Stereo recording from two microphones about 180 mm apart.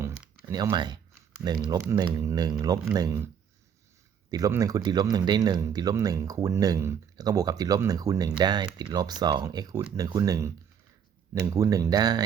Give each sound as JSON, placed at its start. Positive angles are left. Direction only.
{"t": 0.0, "sound": "a sound", "side_deg": -15}
{"t": 1.6, "sound": "speech", "side_deg": -20}
{"t": 4.3, "sound": "speech", "side_deg": -20}
{"t": 11.5, "sound": "speech", "side_deg": -20}